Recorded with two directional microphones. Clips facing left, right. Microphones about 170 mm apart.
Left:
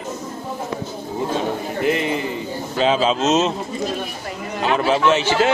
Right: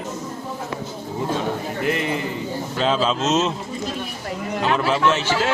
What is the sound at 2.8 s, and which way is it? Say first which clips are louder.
Speech: left 3 dB; 15° left (ahead or behind).